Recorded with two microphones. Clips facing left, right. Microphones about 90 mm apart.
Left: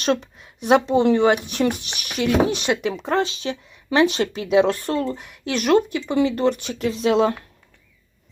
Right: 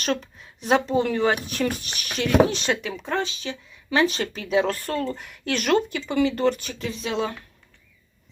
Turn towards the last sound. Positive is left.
turn(degrees=35)  # may be behind; listen again after turning